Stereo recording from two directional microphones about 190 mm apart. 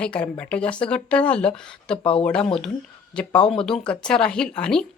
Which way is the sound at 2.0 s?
30° left (ahead or behind).